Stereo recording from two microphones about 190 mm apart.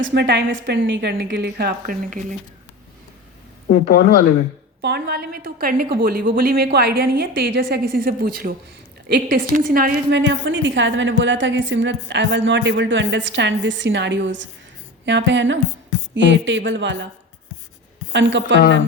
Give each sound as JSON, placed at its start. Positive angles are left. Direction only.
{"t": 0.0, "sound": "speech", "side_deg": -60}
{"t": 3.7, "sound": "speech", "side_deg": 50}
{"t": 4.8, "sound": "a woman's voice", "side_deg": -60}
{"t": 10.1, "sound": "a woman's voice", "side_deg": -70}
{"t": 18.1, "sound": "a woman's voice", "side_deg": -70}